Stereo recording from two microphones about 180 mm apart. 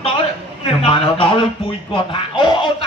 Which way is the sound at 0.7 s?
30° left (ahead or behind).